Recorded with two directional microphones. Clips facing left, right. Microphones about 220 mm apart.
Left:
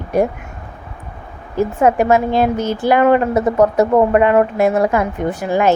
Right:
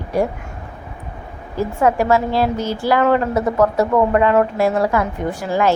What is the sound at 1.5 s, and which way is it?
A woman's voice, 20° left (ahead or behind).